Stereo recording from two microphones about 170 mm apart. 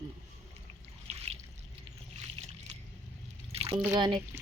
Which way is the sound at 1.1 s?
40° right (ahead or behind).